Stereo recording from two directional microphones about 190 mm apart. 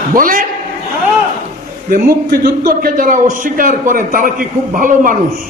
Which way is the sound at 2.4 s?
50° right (ahead or behind).